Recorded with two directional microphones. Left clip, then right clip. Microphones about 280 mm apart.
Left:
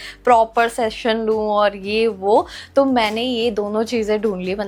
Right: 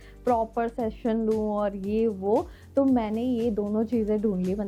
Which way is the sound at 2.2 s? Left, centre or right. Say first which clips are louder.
Left 9 dB; left.